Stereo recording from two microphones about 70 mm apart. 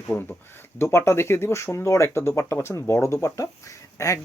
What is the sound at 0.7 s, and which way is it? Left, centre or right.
Speech, left.